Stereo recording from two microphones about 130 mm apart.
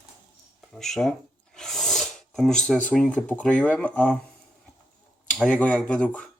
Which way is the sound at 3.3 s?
10° left (ahead or behind).